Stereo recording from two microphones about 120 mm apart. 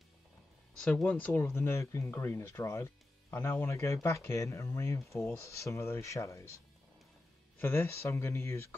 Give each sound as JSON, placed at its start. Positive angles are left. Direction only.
{"t": 0.7, "sound": "speech", "side_deg": 10}
{"t": 7.5, "sound": "speech", "side_deg": 15}